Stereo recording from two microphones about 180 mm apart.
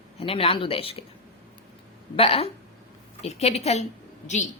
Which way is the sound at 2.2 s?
35° left (ahead or behind).